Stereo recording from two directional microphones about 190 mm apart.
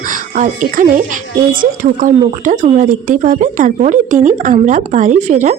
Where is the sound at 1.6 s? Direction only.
45° right (ahead or behind).